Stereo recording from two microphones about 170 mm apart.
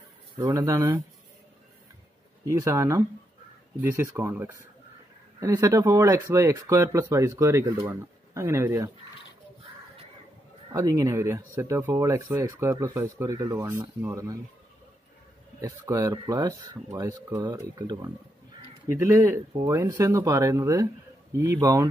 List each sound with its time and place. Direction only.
0.4 s speech: 20° right (ahead or behind)
2.4 s speech: 15° right (ahead or behind)
10.7 s speech: 20° right (ahead or behind)
15.6 s speech: 20° right (ahead or behind)